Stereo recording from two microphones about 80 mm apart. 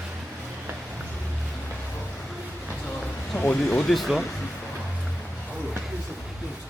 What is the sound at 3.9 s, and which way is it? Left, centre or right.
Speech, centre.